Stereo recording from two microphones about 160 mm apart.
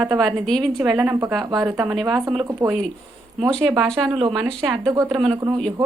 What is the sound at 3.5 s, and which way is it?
Speech, centre (ahead or behind).